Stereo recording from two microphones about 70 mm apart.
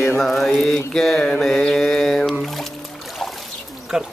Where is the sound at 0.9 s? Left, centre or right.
Centre.